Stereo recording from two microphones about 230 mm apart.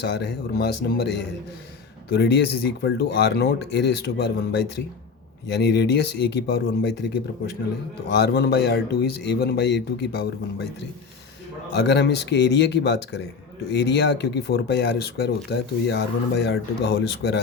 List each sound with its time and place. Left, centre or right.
0.0 s speech: left
11.8 s speech: left